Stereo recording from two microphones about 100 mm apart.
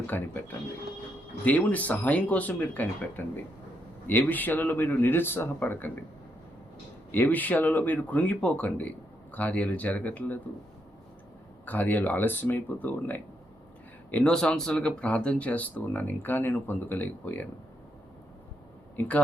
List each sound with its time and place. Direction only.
0.1 s speech: 20° left (ahead or behind)
1.5 s speech: 15° left (ahead or behind)
7.1 s speech: 20° left (ahead or behind)
11.6 s speech: 15° left (ahead or behind)